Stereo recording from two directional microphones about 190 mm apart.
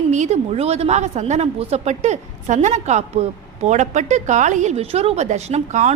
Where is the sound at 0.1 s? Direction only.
35° right (ahead or behind).